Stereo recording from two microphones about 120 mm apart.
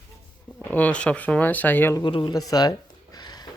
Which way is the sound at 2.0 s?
40° left (ahead or behind).